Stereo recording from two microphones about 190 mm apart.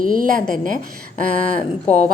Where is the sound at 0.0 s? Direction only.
45° right (ahead or behind).